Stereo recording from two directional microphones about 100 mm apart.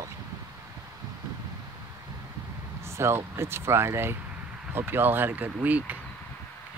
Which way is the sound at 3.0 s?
25° right (ahead or behind).